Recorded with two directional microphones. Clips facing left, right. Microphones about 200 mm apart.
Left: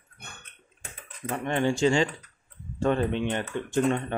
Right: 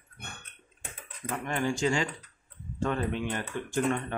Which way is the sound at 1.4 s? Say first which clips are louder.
Left 5 dB; 25° left (ahead or behind).